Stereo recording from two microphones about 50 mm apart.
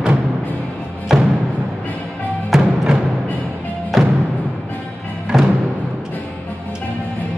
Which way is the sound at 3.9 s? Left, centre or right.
Centre.